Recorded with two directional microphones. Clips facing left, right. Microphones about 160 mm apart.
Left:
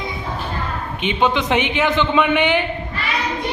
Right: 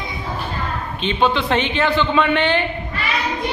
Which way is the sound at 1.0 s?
15° left (ahead or behind).